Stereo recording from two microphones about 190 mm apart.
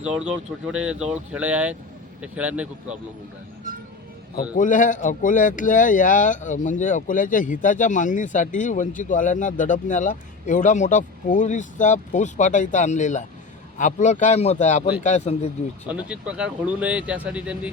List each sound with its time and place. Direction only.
0.0 s speech: 5° right (ahead or behind)
4.5 s speech: 40° left (ahead or behind)
15.9 s speech: 5° right (ahead or behind)